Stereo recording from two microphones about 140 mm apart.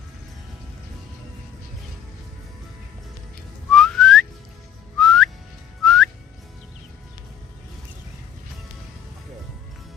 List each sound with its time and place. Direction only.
3.7 s whistling: 5° left (ahead or behind)